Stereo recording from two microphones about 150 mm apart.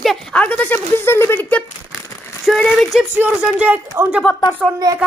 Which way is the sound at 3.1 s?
10° right (ahead or behind).